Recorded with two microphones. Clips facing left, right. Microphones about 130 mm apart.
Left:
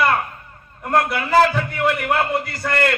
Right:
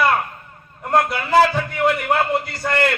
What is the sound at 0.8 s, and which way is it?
A man's voice, 25° right (ahead or behind).